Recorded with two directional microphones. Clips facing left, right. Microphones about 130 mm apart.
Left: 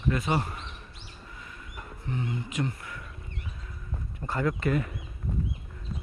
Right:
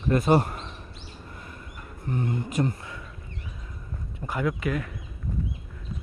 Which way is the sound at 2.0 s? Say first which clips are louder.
Right 5 dB; 50° right (ahead or behind).